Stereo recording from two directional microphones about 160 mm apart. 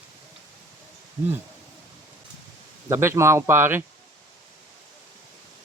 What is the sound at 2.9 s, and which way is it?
Speech, 15° right (ahead or behind).